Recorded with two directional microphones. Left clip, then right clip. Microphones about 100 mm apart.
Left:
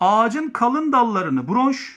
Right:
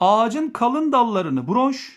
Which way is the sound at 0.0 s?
30° right (ahead or behind).